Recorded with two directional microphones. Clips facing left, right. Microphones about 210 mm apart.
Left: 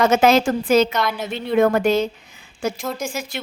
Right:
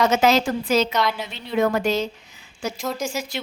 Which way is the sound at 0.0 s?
55° left (ahead or behind).